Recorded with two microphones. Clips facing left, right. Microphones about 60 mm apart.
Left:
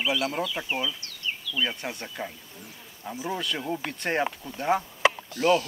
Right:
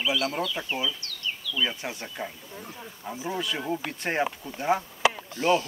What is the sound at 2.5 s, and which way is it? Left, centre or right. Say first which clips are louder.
Speech: right 6 dB; right.